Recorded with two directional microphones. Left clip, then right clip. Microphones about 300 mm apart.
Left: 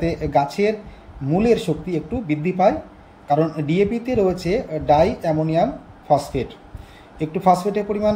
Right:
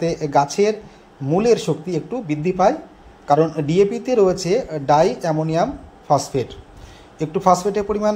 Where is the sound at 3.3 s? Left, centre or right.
Centre.